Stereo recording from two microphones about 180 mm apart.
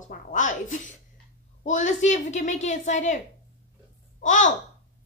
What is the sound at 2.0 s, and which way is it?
A woman's voice, 40° left (ahead or behind).